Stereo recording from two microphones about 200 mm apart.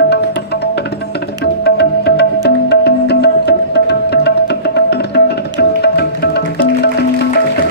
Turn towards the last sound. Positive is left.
turn(degrees=55)  # may be behind; listen again after turning